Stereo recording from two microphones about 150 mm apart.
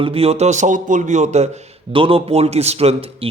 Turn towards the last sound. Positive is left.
turn(degrees=-40)  # may be behind; listen again after turning